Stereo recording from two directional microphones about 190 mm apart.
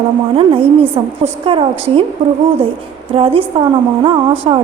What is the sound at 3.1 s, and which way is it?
Speech, 30° right (ahead or behind).